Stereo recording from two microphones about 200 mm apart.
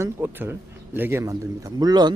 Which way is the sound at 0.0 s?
10° right (ahead or behind).